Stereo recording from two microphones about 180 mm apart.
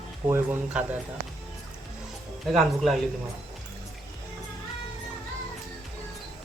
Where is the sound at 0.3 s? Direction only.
10° right (ahead or behind).